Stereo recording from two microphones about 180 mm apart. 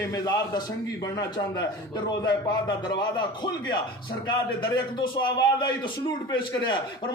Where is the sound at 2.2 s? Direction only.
25° left (ahead or behind).